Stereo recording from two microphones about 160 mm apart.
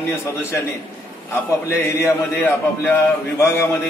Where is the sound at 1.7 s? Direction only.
15° left (ahead or behind).